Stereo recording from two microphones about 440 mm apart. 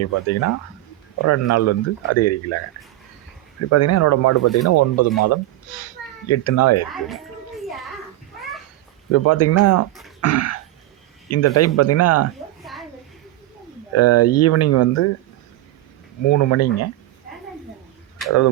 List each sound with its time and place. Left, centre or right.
0.0 s speech: left
3.7 s speech: left
4.4 s speech: centre
4.7 s a child's voice: left
6.9 s a sound: centre
9.1 s speech: left
10.2 s throat clearing: left
11.3 s speech: left
12.6 s a sound: centre
13.9 s speech: left
16.2 s speech: left